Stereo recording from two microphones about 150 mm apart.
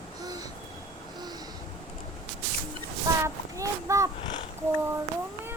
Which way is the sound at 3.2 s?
20° right (ahead or behind).